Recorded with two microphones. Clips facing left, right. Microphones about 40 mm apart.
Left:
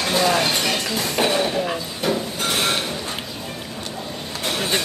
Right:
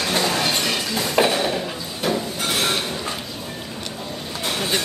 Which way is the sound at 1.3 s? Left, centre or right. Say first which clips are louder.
Left 1 dB; centre.